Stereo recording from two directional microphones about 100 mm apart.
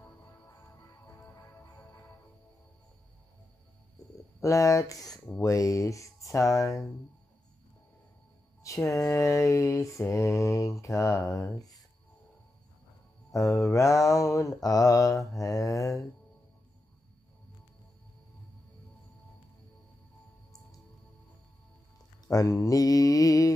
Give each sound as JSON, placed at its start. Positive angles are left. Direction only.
{"t": 0.6, "sound": "music", "side_deg": 30}
{"t": 4.4, "sound": "mantra", "side_deg": 30}
{"t": 8.6, "sound": "mantra", "side_deg": 30}
{"t": 11.5, "sound": "speech", "side_deg": 40}
{"t": 13.3, "sound": "mantra", "side_deg": 30}
{"t": 22.3, "sound": "mantra", "side_deg": 35}